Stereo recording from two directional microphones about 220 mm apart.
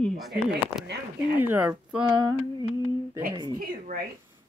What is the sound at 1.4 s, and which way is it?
Speech, 10° right (ahead or behind).